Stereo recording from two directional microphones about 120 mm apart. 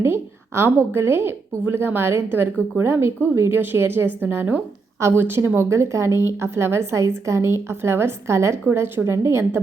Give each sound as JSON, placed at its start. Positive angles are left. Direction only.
{"t": 0.0, "sound": "a woman's voice", "side_deg": -20}